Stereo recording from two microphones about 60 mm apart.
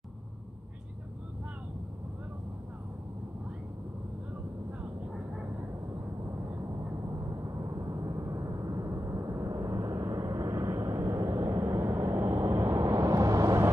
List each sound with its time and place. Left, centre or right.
6.2 s vehicle: right